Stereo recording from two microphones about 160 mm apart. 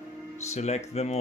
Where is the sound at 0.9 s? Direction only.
40° left (ahead or behind).